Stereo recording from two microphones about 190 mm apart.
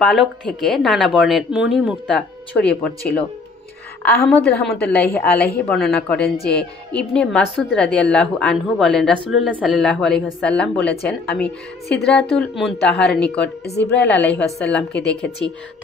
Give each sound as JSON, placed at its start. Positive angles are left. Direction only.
{"t": 0.0, "sound": "speech", "side_deg": 5}
{"t": 13.7, "sound": "a woman's voice", "side_deg": 65}
{"t": 14.2, "sound": "speech", "side_deg": 5}